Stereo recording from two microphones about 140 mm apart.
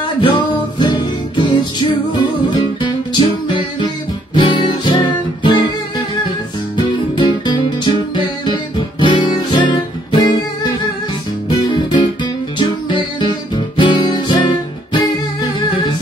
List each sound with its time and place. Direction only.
0.2 s music: 35° left (ahead or behind)
4.4 s music: 35° left (ahead or behind)
7.2 s music: 35° left (ahead or behind)
13.7 s music: 30° left (ahead or behind)